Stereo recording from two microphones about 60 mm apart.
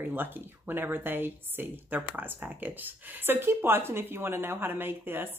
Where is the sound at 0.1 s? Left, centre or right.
Right.